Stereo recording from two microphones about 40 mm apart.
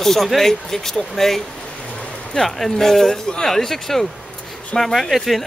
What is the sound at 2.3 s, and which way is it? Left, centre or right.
Speech, centre.